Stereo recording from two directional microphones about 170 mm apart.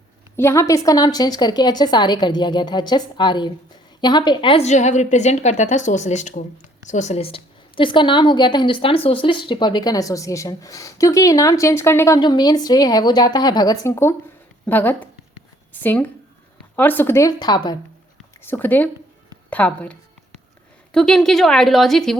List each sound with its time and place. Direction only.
0.3 s a woman's voice: 15° left (ahead or behind)
18.4 s a woman's voice: 10° left (ahead or behind)